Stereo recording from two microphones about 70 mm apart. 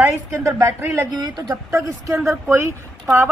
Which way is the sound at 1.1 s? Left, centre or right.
Right.